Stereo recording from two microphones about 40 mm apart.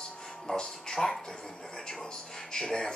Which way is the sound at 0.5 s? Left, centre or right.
Centre.